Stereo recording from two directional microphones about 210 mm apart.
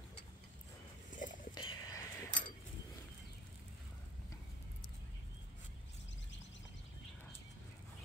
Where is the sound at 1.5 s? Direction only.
15° left (ahead or behind).